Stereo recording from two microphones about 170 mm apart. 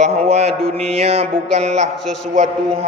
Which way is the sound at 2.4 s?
35° right (ahead or behind).